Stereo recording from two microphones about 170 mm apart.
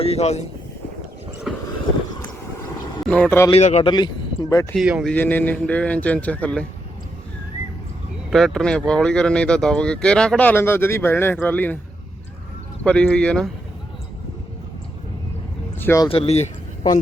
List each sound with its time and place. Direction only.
0.0 s speech: 35° left (ahead or behind)
1.5 s vehicle: centre (ahead or behind)
3.0 s a man's voice: 10° left (ahead or behind)
3.5 s speech: 40° left (ahead or behind)
3.9 s speech: 25° left (ahead or behind)
4.7 s speech: 5° right (ahead or behind)
5.1 s a man's voice: 10° left (ahead or behind)
8.3 s speech: centre (ahead or behind)
12.8 s speech: 5° left (ahead or behind)
15.8 s speech: 15° left (ahead or behind)
16.0 s speech: 35° left (ahead or behind)